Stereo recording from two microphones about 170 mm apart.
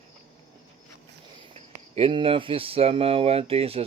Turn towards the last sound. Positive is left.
turn(degrees=-35)  # may be behind; listen again after turning